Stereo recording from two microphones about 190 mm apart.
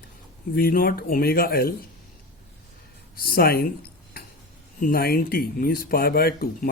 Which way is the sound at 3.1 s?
50° left (ahead or behind).